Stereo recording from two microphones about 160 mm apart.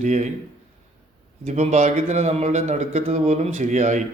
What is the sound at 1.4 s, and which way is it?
A man's voice, 45° right (ahead or behind).